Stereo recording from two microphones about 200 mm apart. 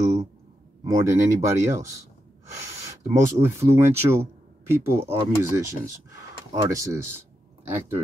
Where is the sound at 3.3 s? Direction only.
15° right (ahead or behind).